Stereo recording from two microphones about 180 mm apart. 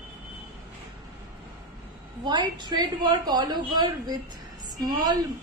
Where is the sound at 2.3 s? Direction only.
25° right (ahead or behind).